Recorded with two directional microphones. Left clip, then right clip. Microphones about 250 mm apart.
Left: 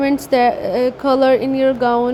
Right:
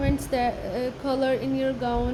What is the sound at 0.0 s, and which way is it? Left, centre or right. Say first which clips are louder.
A woman's voice: left 11 dB; left.